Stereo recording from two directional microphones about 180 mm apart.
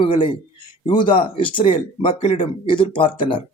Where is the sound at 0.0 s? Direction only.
30° left (ahead or behind).